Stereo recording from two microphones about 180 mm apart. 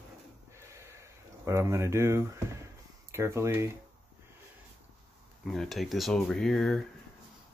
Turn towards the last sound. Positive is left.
turn(degrees=0)  # may be behind; listen again after turning